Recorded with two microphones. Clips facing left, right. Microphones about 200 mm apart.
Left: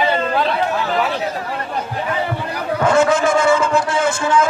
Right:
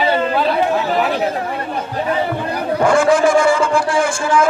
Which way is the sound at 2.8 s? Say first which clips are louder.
Right 2 dB; 25° left (ahead or behind).